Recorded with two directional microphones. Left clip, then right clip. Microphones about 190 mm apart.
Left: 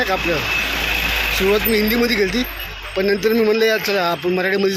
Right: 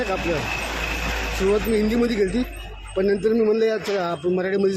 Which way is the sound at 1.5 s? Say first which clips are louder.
Left 4 dB; centre (ahead or behind).